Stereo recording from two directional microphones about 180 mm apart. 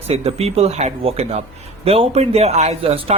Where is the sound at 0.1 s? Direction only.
35° right (ahead or behind).